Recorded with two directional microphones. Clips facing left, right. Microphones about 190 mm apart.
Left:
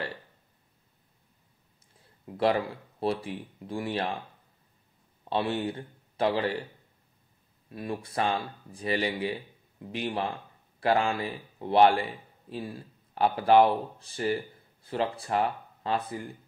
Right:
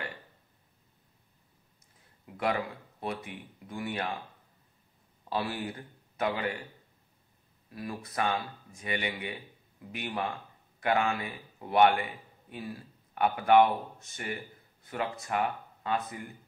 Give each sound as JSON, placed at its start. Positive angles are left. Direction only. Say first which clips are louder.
{"t": 2.0, "sound": "speech", "louder": "left 8 dB", "side_deg": 30}
{"t": 5.3, "sound": "a man's voice", "louder": "left 5 dB", "side_deg": 25}
{"t": 7.7, "sound": "speech", "louder": "left 4 dB", "side_deg": 25}